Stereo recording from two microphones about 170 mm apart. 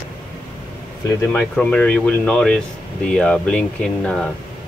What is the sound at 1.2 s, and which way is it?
Speech, 5° left (ahead or behind).